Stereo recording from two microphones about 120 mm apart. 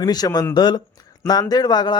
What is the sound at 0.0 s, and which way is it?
Speech, 35° left (ahead or behind).